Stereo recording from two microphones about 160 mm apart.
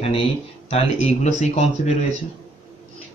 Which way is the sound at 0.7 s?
45° left (ahead or behind).